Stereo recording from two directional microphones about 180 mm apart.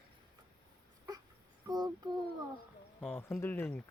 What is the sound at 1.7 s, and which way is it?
Speech, 20° right (ahead or behind).